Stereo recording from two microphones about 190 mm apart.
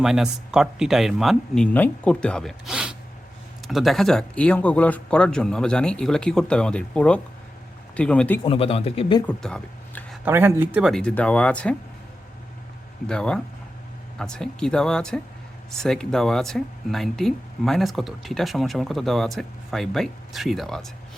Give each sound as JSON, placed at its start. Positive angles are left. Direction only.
{"t": 0.0, "sound": "speech", "side_deg": 0}
{"t": 8.4, "sound": "speech", "side_deg": 30}
{"t": 9.2, "sound": "a sound", "side_deg": 5}
{"t": 10.2, "sound": "speech", "side_deg": -10}
{"t": 13.1, "sound": "speech", "side_deg": 5}